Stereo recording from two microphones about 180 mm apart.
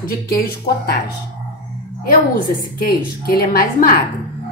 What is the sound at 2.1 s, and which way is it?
A woman's voice, 50° left (ahead or behind).